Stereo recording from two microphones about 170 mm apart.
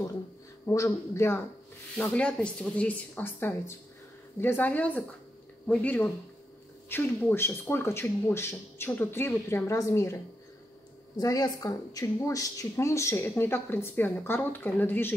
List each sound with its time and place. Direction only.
0.7 s speech: 15° left (ahead or behind)